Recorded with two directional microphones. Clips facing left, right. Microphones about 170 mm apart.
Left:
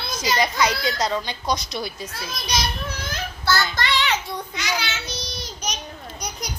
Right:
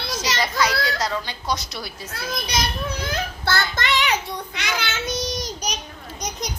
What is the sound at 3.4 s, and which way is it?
Child singing, 50° right (ahead or behind).